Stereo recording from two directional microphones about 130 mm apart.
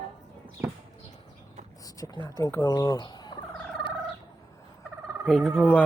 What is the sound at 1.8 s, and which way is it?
Speech, 30° left (ahead or behind).